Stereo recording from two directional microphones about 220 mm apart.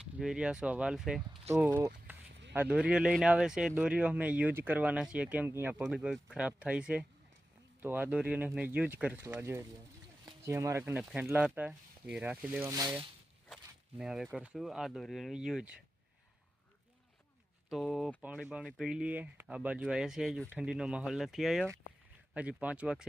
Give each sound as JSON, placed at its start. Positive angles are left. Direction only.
{"t": 0.0, "sound": "speech", "side_deg": -5}
{"t": 14.0, "sound": "speech", "side_deg": 0}
{"t": 17.7, "sound": "speech", "side_deg": 0}